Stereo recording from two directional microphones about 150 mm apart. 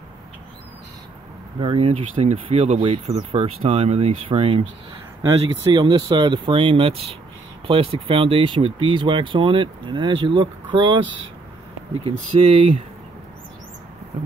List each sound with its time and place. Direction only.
1.6 s speech: 40° right (ahead or behind)
5.6 s speech: 30° right (ahead or behind)
12.3 s speech: 40° right (ahead or behind)